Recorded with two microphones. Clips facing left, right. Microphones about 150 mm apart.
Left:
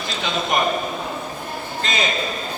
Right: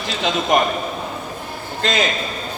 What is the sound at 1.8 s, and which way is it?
Speech, 70° right (ahead or behind).